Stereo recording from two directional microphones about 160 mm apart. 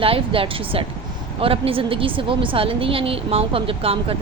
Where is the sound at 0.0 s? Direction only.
35° right (ahead or behind).